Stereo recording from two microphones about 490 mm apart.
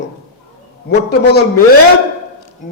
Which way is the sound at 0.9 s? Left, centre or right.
Left.